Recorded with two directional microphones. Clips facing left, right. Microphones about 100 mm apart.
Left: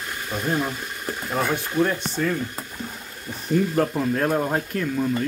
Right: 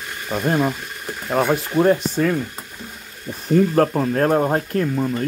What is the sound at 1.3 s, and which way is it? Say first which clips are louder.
Speech: right 5 dB; 45° right (ahead or behind).